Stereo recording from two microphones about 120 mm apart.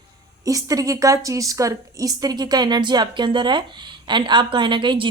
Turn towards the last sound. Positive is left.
turn(degrees=-40)  # may be behind; listen again after turning